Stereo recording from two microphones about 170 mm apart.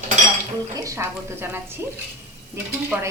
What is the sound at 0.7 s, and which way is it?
A woman's voice, 20° right (ahead or behind).